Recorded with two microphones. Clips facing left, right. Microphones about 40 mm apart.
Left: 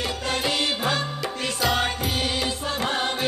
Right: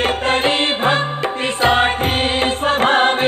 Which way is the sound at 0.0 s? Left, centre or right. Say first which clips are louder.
Right 10 dB; right.